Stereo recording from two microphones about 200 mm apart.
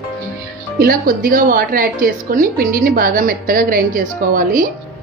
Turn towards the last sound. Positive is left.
turn(degrees=-45)  # may be behind; listen again after turning